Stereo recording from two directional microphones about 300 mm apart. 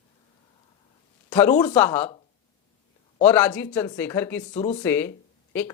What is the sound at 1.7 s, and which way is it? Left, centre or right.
Speech, centre.